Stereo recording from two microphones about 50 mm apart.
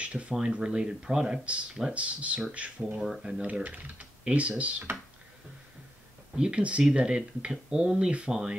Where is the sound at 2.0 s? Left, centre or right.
Right.